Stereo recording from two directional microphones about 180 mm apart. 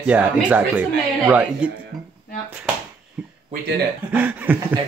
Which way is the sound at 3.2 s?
5° right (ahead or behind).